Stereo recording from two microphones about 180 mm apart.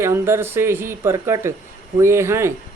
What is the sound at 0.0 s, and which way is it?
Speech, 15° right (ahead or behind).